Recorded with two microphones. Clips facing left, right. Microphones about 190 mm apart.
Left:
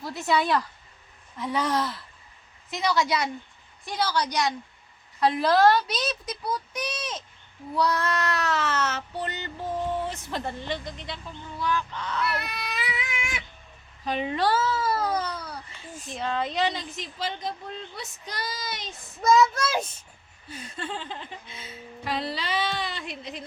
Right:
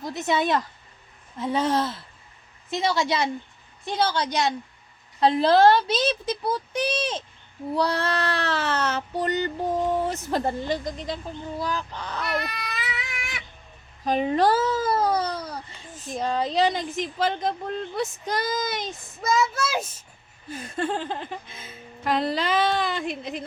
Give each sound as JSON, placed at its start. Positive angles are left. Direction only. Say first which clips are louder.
{"t": 0.0, "sound": "speech", "louder": "right 1 dB", "side_deg": -20}
{"t": 12.7, "sound": "a sound", "louder": "left 1 dB", "side_deg": 0}
{"t": 14.0, "sound": "speech", "louder": "right 5 dB", "side_deg": -45}
{"t": 16.7, "sound": "speech", "louder": "right 8 dB", "side_deg": -50}
{"t": 19.2, "sound": "a child's voice", "louder": "left 3 dB", "side_deg": 0}
{"t": 20.5, "sound": "speech", "louder": "right 7 dB", "side_deg": -50}